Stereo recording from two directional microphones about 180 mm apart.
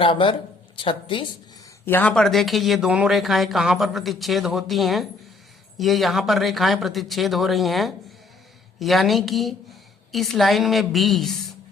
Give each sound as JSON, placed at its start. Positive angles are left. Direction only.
{"t": 0.0, "sound": "a woman's voice", "side_deg": 30}
{"t": 1.8, "sound": "speech", "side_deg": 10}